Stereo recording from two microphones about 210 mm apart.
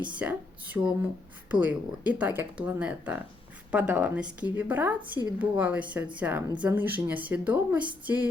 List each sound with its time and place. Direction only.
0.0 s speech: 5° right (ahead or behind)